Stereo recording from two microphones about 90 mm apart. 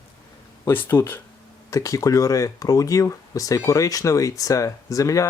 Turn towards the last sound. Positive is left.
turn(degrees=35)  # may be behind; listen again after turning